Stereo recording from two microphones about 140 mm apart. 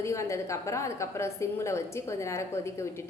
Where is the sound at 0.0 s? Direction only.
20° left (ahead or behind).